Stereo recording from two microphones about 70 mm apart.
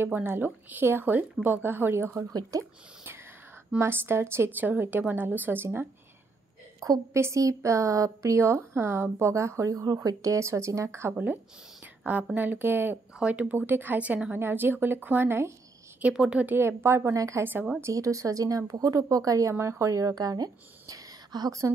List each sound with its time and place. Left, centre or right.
0.0 s a woman's voice: right
2.5 s speech: right
3.8 s a woman's voice: right
4.6 s a woman's voice: right
6.8 s speech: right
12.0 s a woman's voice: right
13.2 s a woman's voice: centre; by 15.5 s right
16.0 s a woman's voice: centre
16.4 s a woman's voice: right
17.4 s a woman's voice: right
17.9 s a woman's voice: right